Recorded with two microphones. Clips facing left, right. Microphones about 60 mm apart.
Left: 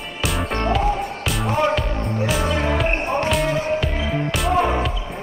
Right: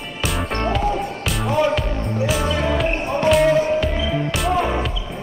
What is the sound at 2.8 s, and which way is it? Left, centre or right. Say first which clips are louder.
Music: right 1 dB; left.